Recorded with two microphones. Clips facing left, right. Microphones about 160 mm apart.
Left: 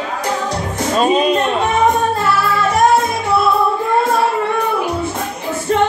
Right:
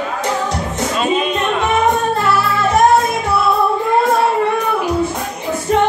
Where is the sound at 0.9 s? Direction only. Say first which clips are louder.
Left 4 dB; 40° left (ahead or behind).